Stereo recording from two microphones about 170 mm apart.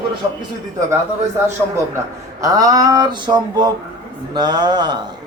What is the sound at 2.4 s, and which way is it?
A man's voice, 20° right (ahead or behind).